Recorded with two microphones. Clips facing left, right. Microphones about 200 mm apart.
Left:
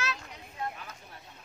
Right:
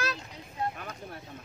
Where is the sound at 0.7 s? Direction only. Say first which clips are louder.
Right 6 dB; 60° right (ahead or behind).